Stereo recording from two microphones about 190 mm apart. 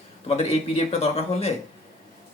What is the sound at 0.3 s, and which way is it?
Speech, 35° left (ahead or behind).